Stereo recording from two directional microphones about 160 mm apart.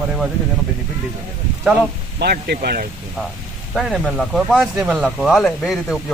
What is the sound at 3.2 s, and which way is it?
Speech, 5° right (ahead or behind).